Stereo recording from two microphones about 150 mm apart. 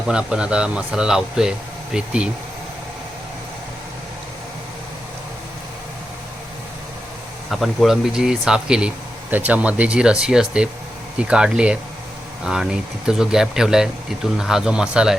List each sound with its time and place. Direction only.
0.1 s speech: 5° right (ahead or behind)
7.5 s speech: centre (ahead or behind)